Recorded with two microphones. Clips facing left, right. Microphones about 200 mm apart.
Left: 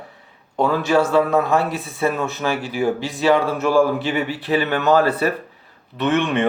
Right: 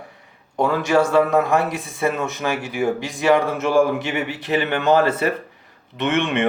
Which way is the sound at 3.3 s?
20° right (ahead or behind).